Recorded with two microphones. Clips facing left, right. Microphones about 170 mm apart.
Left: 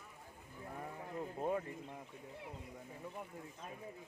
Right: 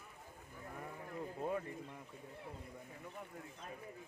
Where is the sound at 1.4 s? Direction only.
25° left (ahead or behind).